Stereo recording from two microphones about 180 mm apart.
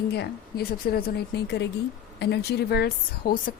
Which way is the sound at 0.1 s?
65° left (ahead or behind).